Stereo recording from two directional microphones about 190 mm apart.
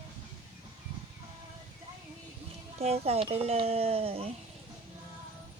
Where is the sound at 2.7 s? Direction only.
35° right (ahead or behind).